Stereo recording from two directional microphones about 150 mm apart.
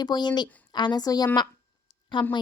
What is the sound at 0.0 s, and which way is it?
Speech, 30° left (ahead or behind).